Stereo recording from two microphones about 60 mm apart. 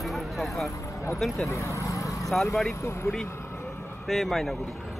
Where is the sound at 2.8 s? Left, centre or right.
Left.